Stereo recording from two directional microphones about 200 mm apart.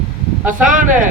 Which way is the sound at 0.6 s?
40° right (ahead or behind).